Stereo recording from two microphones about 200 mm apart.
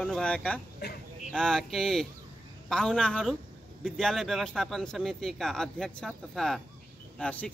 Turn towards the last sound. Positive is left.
turn(degrees=5)  # may be behind; listen again after turning